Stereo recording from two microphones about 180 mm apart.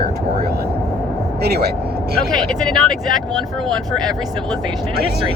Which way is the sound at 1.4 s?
60° right (ahead or behind).